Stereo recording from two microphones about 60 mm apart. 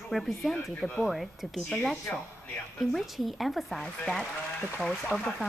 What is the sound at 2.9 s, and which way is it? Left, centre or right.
Speech, centre.